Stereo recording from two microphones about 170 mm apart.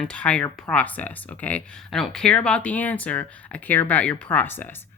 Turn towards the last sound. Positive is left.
turn(degrees=10)  # may be behind; listen again after turning